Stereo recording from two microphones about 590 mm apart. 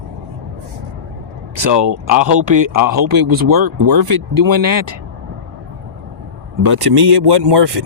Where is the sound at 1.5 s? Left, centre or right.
Right.